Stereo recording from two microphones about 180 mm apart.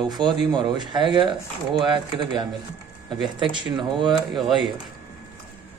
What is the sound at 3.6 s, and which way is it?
Speech, 25° right (ahead or behind).